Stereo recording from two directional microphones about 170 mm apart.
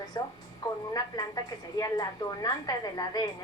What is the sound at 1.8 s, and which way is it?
A woman's voice, 25° left (ahead or behind).